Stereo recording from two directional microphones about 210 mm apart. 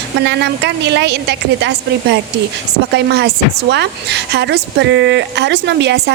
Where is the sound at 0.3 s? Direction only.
55° right (ahead or behind).